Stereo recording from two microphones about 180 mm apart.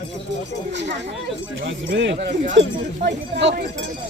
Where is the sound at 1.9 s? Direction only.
90° right; by 3.5 s 70° right (ahead or behind).